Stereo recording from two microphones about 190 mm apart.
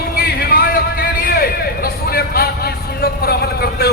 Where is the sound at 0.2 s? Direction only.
50° left (ahead or behind).